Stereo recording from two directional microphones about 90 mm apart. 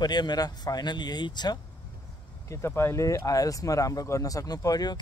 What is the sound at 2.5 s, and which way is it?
Speech, 30° left (ahead or behind).